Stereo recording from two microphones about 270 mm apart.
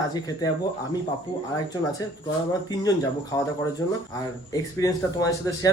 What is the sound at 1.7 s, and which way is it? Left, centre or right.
Speech, centre.